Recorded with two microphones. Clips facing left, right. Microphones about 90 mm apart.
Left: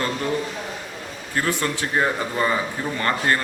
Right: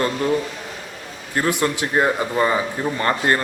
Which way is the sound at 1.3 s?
15° right (ahead or behind).